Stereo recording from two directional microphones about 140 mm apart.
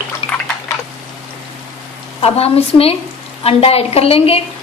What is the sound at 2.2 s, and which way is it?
A woman's voice, 45° left (ahead or behind).